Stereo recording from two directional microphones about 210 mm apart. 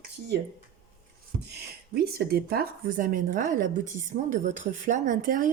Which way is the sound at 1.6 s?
50° right (ahead or behind).